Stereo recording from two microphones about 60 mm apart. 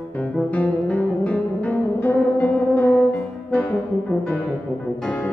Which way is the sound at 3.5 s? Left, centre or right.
Left.